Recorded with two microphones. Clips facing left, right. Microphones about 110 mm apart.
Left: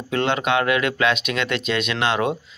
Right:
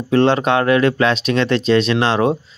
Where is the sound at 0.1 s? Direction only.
35° right (ahead or behind).